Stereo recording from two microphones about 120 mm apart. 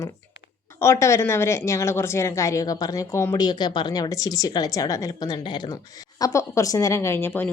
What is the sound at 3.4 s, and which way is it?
A woman's voice, 35° left (ahead or behind).